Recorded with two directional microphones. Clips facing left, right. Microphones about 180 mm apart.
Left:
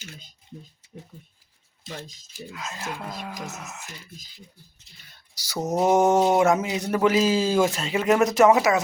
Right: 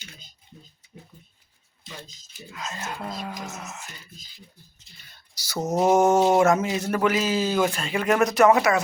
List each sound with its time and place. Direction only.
2.5 s speech: 5° left (ahead or behind)
5.5 s speech: centre (ahead or behind)
5.9 s a man's voice: 15° left (ahead or behind)
7.1 s speech: 30° left (ahead or behind)